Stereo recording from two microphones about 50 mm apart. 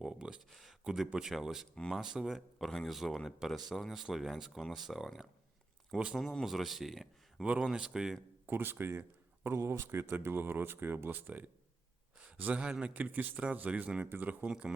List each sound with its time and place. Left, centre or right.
0.0 s a sound: centre
0.5 s a sound: centre
0.9 s speech: centre
1.7 s speech: centre
2.0 s speech: centre
2.6 s speech: centre
7.6 s speech: centre
8.4 s speech: right
9.5 s speech: right
10.1 s speech: right
12.2 s a sound: right
12.8 s a man's voice: right
14.0 s a man's voice: right